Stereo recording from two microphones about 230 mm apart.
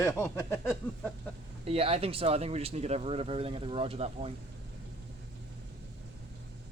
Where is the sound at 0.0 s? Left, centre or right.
Centre.